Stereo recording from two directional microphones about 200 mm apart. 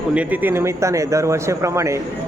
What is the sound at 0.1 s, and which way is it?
Speech, 10° right (ahead or behind).